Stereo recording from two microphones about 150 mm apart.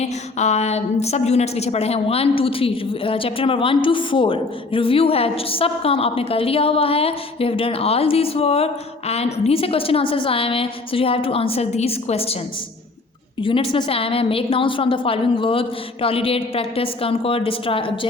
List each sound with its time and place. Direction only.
0.0 s a woman's voice: 50° left (ahead or behind)
13.4 s a woman's voice: 35° left (ahead or behind)